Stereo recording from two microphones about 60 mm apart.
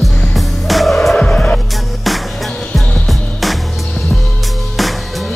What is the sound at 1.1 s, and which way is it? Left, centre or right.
Music, centre.